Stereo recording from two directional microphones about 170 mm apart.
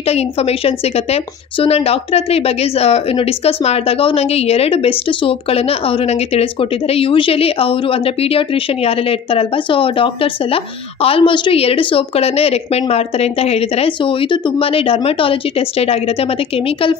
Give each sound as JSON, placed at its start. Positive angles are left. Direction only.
{"t": 0.0, "sound": "a woman's voice", "side_deg": 35}